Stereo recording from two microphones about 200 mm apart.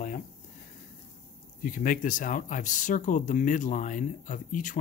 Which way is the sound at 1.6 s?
40° left (ahead or behind).